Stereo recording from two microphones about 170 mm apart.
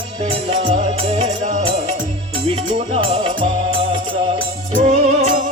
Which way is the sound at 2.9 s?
35° right (ahead or behind).